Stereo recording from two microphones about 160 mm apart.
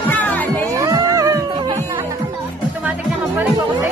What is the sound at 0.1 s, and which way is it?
Music, 10° left (ahead or behind).